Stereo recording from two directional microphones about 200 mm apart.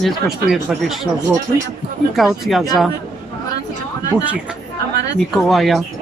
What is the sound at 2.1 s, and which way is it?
Speech, centre (ahead or behind).